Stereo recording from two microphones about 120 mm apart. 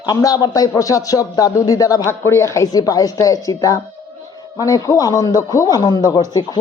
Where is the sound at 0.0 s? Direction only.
30° left (ahead or behind).